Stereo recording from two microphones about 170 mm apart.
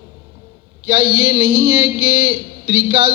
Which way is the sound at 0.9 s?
35° right (ahead or behind).